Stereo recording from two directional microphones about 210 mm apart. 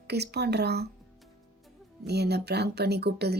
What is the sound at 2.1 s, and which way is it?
Speech, 50° right (ahead or behind).